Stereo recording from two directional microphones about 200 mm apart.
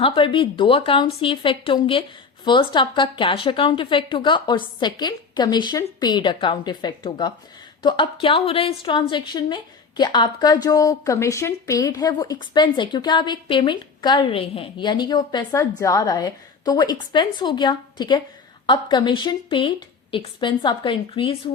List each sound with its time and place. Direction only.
0.0 s a woman's voice: 25° left (ahead or behind)